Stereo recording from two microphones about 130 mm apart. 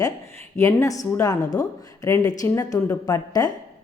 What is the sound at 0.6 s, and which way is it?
Speech, 25° left (ahead or behind).